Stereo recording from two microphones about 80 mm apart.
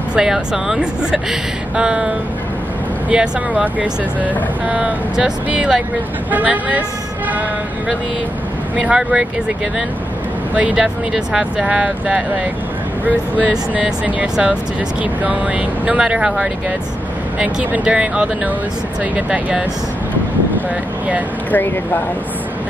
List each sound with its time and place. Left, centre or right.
0.1 s speech: centre
8.7 s speech: centre
10.5 s speech: centre
21.5 s speech: left